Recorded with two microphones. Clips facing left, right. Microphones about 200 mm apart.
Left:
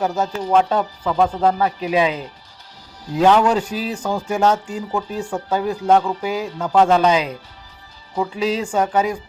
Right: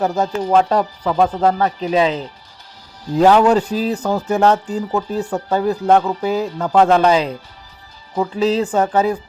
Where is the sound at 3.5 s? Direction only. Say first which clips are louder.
Right 5 dB; 10° left (ahead or behind).